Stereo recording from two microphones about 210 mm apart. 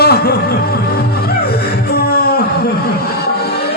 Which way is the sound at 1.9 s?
50° left (ahead or behind).